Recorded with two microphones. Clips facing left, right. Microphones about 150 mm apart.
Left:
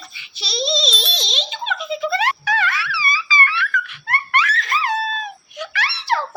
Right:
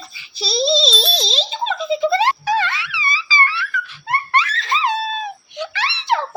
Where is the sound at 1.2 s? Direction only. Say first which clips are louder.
Right 4 dB; 35° right (ahead or behind).